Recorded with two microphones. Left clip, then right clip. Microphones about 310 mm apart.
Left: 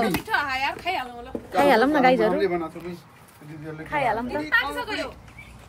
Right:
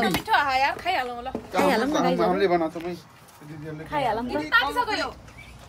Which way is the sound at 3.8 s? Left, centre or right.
Centre.